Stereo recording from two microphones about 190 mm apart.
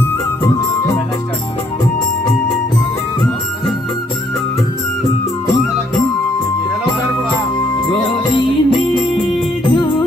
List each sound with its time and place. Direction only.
8.7 s music: 25° left (ahead or behind)